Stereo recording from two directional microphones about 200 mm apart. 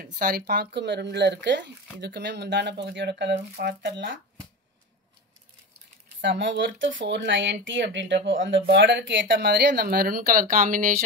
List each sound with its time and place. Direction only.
0.0 s speech: 45° right (ahead or behind)
6.2 s speech: 65° right (ahead or behind); by 10.9 s 45° right (ahead or behind)